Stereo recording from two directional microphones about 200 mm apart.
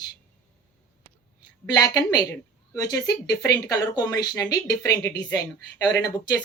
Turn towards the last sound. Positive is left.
turn(degrees=20)  # may be behind; listen again after turning